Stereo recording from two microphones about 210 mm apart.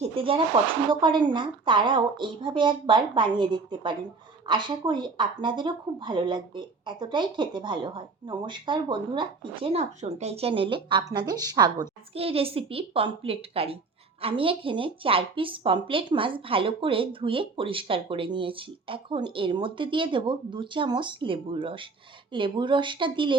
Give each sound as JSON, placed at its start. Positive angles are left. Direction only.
{"t": 0.0, "sound": "speech", "side_deg": -25}